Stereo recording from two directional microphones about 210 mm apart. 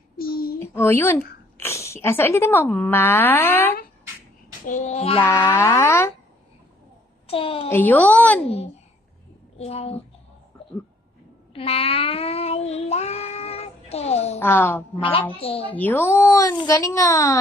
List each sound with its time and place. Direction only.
0.2 s a sound: 45° left (ahead or behind)
0.6 s speech: 10° left (ahead or behind)
4.6 s child singing: 35° left (ahead or behind)
5.2 s a child's voice: 15° left (ahead or behind)
7.2 s a child's voice: 25° left (ahead or behind)
7.7 s a child's voice: 10° left (ahead or behind)
9.6 s a child's voice: 30° left (ahead or behind)
11.5 s child singing: 30° left (ahead or behind)
14.4 s a child's voice: 10° left (ahead or behind)
15.0 s a child's voice: 25° left (ahead or behind)
15.6 s a child's voice: 10° left (ahead or behind)